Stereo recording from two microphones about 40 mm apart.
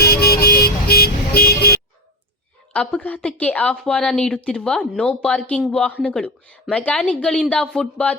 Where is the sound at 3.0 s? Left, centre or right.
Left.